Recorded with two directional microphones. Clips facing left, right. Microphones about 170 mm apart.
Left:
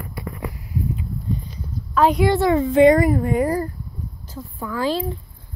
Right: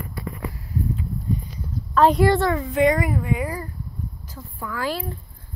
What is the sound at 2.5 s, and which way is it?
A child's voice, 30° left (ahead or behind).